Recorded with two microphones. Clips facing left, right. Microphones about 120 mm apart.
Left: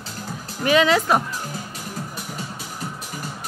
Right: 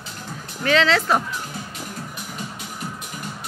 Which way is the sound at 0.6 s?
15° left (ahead or behind).